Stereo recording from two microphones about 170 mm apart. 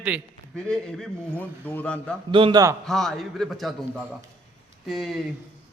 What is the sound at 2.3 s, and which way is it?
Speech, 30° right (ahead or behind).